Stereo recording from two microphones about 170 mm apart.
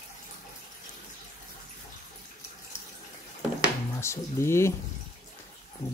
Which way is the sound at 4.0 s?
15° left (ahead or behind).